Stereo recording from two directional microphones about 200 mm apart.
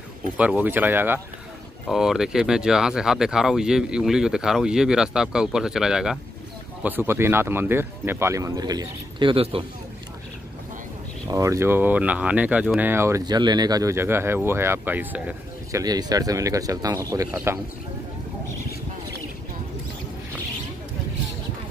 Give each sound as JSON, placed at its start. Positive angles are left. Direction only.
{"t": 0.4, "sound": "speech", "side_deg": -5}
{"t": 11.2, "sound": "speech", "side_deg": -15}
{"t": 15.8, "sound": "speech", "side_deg": -20}